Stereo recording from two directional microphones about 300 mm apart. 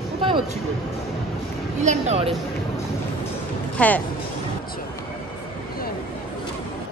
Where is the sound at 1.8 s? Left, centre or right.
Right.